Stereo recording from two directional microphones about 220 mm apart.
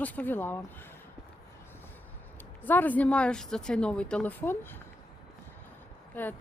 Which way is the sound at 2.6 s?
10° left (ahead or behind).